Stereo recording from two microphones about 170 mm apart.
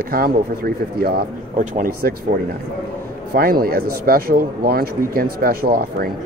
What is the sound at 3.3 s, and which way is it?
Speech, 60° right (ahead or behind).